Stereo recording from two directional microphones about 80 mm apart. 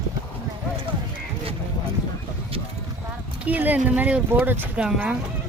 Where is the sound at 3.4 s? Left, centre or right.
Centre.